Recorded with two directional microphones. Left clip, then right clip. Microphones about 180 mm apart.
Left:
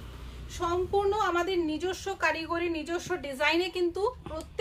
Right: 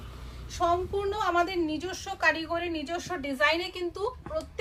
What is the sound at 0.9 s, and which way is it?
A woman's voice, 30° left (ahead or behind).